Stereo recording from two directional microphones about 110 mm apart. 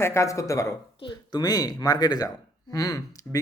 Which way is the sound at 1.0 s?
40° left (ahead or behind).